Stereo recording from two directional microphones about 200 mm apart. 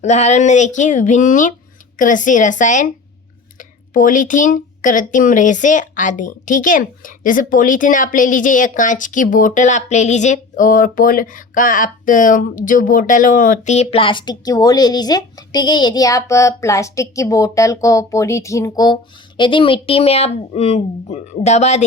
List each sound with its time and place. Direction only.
0.0 s speech: 35° left (ahead or behind)